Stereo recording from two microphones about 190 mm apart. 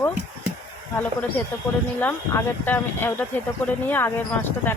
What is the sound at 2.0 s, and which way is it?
Speech, 10° left (ahead or behind).